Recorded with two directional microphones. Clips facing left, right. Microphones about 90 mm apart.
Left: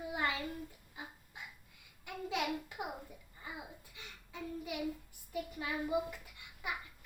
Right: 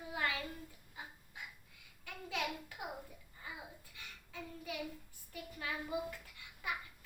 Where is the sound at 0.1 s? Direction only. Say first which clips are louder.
Left 1 dB; 20° left (ahead or behind).